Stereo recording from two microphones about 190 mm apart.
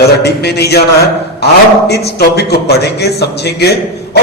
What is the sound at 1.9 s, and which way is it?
A man's voice, 60° left (ahead or behind).